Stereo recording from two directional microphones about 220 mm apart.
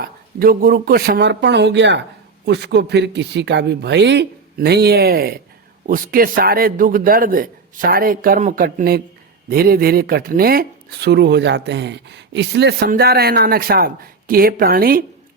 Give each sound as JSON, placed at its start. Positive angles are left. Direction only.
{"t": 0.0, "sound": "a man's voice", "side_deg": -40}